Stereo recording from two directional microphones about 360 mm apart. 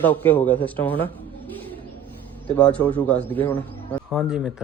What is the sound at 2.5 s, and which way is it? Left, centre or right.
A man's voice, centre.